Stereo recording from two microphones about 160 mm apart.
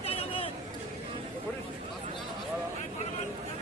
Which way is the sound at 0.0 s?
35° left (ahead or behind).